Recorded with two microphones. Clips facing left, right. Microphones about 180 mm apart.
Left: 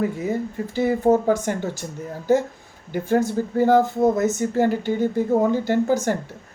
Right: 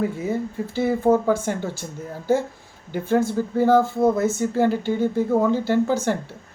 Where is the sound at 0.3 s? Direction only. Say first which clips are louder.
Even; 15° left (ahead or behind).